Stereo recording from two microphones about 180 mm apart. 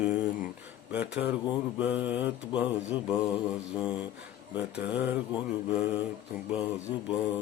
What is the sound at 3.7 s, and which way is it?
Mantra, 5° right (ahead or behind).